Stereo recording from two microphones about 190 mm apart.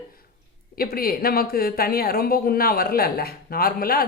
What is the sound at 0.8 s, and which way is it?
Speech, 50° left (ahead or behind).